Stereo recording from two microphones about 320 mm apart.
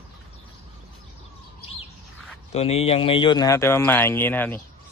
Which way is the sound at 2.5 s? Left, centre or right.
Centre.